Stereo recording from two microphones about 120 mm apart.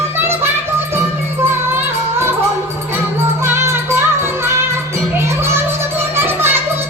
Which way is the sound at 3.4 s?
20° right (ahead or behind).